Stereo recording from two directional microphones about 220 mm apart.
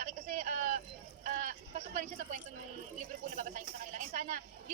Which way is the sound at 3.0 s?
35° right (ahead or behind).